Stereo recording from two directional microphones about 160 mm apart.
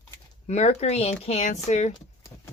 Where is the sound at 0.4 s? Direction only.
45° left (ahead or behind).